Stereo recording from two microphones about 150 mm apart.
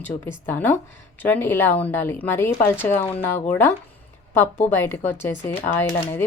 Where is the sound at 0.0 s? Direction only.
15° left (ahead or behind).